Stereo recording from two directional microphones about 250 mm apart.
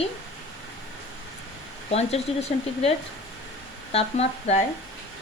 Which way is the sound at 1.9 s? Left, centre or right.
Left.